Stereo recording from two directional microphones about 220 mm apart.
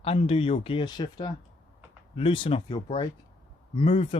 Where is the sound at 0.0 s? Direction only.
25° left (ahead or behind).